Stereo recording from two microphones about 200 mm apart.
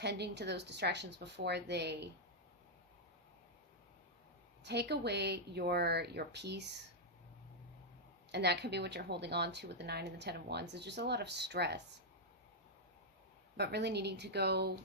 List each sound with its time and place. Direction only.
0.0 s speech: 55° right (ahead or behind)
4.6 s speech: 55° right (ahead or behind)
8.3 s speech: 55° right (ahead or behind)
13.6 s speech: 55° right (ahead or behind)